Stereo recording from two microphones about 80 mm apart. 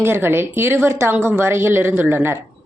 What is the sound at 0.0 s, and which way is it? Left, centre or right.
A woman's voice, right.